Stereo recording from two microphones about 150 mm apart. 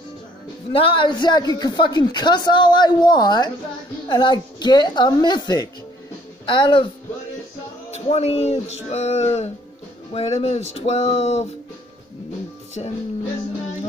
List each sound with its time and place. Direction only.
0.7 s a woman's voice: 35° left (ahead or behind)
7.9 s speech: 45° left (ahead or behind)
12.8 s speech: 45° left (ahead or behind)